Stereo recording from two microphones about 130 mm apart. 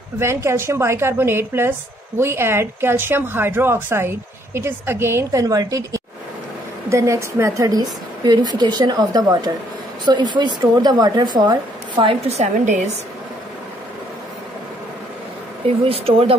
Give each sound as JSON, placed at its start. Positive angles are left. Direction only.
{"t": 0.2, "sound": "a woman's voice", "side_deg": -20}
{"t": 12.3, "sound": "a woman's voice", "side_deg": -60}
{"t": 15.9, "sound": "speech", "side_deg": -45}